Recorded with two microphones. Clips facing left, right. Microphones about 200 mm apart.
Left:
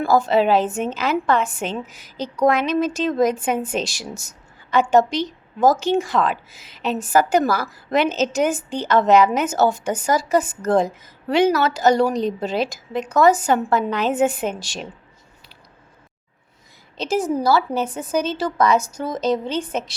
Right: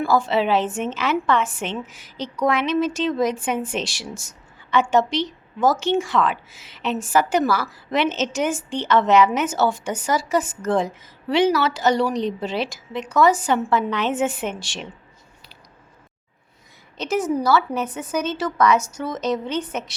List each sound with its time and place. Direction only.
0.0 s a woman's voice: 40° left (ahead or behind)
17.0 s a woman's voice: 30° left (ahead or behind)